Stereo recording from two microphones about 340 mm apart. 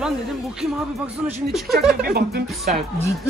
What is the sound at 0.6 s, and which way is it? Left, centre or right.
Speech, centre.